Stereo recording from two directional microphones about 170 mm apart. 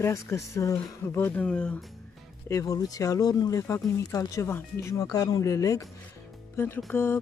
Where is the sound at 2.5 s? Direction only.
20° left (ahead or behind).